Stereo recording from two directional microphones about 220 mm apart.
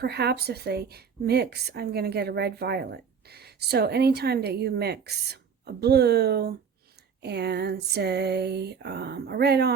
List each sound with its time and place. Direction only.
0.0 s speech: 45° right (ahead or behind)